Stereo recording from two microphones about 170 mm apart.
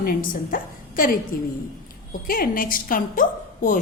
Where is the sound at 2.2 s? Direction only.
55° left (ahead or behind).